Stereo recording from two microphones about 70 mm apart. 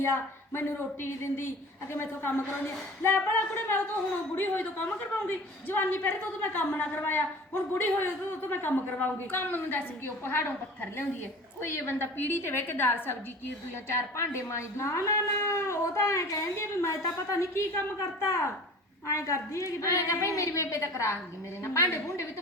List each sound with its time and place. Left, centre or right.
0.0 s a woman's voice: left
11.7 s a woman's voice: left